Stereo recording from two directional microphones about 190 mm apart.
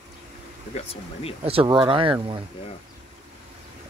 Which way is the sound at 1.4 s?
30° right (ahead or behind).